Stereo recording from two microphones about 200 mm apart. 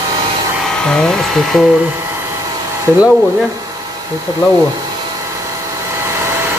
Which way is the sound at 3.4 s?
15° right (ahead or behind).